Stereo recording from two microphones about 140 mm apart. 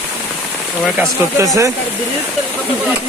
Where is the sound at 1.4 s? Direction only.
25° right (ahead or behind).